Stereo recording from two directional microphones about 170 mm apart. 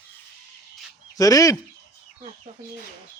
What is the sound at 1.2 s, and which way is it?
Speech, 20° left (ahead or behind).